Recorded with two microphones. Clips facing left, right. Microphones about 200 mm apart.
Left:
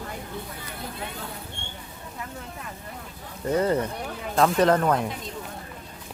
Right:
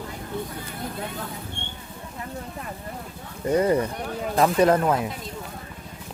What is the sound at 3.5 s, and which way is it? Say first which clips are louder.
Speech: right 2 dB; 10° right (ahead or behind).